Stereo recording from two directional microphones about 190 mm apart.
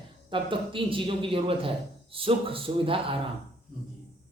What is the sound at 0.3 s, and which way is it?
A man's voice, 25° right (ahead or behind).